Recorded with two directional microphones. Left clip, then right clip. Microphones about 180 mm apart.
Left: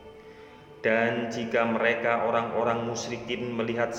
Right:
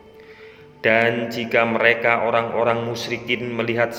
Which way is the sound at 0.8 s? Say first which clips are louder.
Right 7 dB; 25° right (ahead or behind).